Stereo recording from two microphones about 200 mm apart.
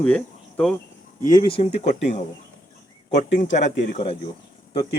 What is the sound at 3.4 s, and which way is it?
Speech, 35° left (ahead or behind).